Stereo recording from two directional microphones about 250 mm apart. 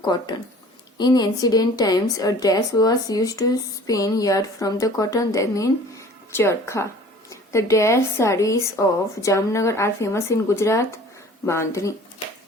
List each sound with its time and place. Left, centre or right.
0.0 s a woman's voice: centre